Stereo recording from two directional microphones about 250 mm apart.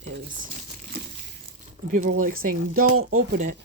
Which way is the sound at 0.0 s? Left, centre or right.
Right.